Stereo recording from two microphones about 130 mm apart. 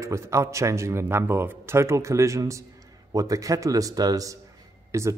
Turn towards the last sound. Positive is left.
turn(degrees=-20)  # may be behind; listen again after turning